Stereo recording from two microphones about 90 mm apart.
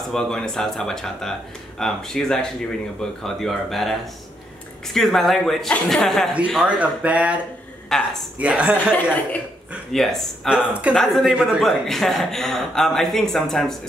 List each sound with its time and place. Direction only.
0.1 s speech: 5° left (ahead or behind)
6.6 s speech: 15° right (ahead or behind)
7.9 s speech: 5° left (ahead or behind)
8.4 s speech: 15° right (ahead or behind)
8.7 s speech: 15° left (ahead or behind)
9.9 s speech: centre (ahead or behind)
10.5 s speech: 15° right (ahead or behind)
11.0 s speech: 5° left (ahead or behind)